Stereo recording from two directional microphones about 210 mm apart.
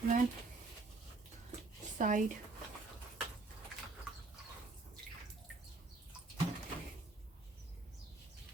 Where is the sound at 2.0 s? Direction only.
35° right (ahead or behind).